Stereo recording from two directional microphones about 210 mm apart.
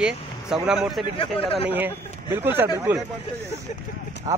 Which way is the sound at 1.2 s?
25° left (ahead or behind).